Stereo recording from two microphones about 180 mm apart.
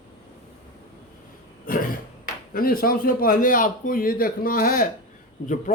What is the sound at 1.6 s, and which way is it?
A man's voice, 50° left (ahead or behind).